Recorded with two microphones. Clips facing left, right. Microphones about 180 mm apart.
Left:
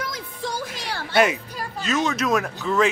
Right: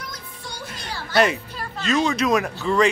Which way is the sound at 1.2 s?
5° left (ahead or behind).